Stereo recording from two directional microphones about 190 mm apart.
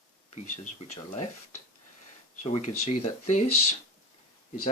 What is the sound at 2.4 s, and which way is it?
Speech, 35° left (ahead or behind).